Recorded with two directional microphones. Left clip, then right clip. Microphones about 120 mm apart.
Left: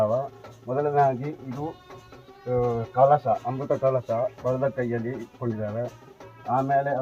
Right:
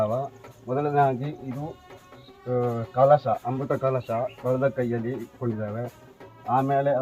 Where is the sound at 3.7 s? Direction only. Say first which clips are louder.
Left 2 dB; 25° left (ahead or behind).